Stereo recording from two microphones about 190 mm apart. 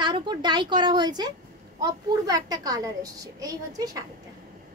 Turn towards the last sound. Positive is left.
turn(degrees=-20)  # may be behind; listen again after turning